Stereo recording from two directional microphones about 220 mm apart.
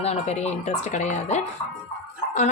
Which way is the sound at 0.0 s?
30° left (ahead or behind).